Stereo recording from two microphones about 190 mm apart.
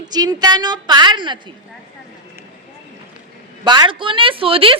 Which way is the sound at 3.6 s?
25° right (ahead or behind).